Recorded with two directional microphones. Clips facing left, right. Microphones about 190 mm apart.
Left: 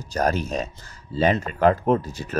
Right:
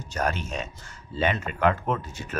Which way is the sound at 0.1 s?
40° left (ahead or behind).